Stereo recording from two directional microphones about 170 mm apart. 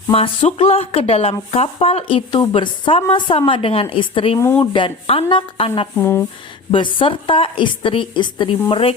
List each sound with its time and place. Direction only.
0.1 s speech: 35° left (ahead or behind)
4.4 s speech: 15° left (ahead or behind)
4.6 s speech: 30° left (ahead or behind)
6.0 s speech: 15° left (ahead or behind)
6.7 s speech: 30° left (ahead or behind)